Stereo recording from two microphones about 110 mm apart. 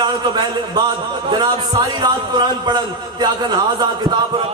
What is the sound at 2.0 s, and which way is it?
A man's voice, 40° right (ahead or behind).